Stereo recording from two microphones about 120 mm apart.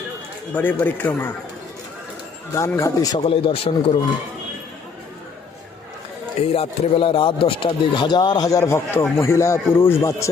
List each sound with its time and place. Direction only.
0.5 s speech: 15° left (ahead or behind)
2.6 s speech: 25° left (ahead or behind)
3.2 s speech: 50° left (ahead or behind)
6.5 s speech: 50° left (ahead or behind); by 10.2 s 25° left (ahead or behind)